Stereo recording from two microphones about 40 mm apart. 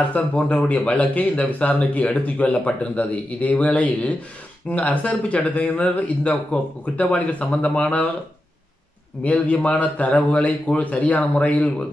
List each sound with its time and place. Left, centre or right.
0.1 s speech: left
9.2 s speech: left